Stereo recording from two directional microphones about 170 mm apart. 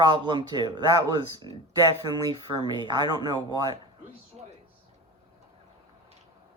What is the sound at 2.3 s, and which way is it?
Speech, 25° right (ahead or behind).